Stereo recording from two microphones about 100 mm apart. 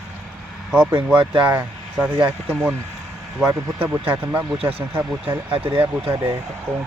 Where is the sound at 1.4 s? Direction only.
10° right (ahead or behind).